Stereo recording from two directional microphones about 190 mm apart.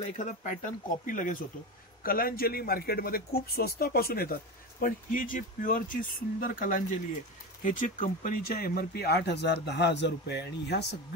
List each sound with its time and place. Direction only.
0.1 s a man's voice: 40° left (ahead or behind); by 10.9 s 60° left (ahead or behind)